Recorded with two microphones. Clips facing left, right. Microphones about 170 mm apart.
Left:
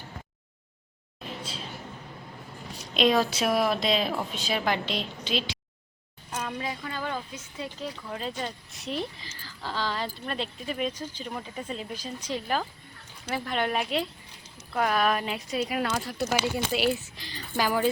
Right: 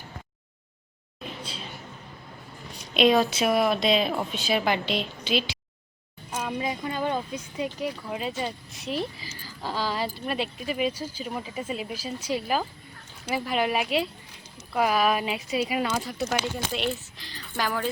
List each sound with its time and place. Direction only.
2.9 s speech: centre (ahead or behind)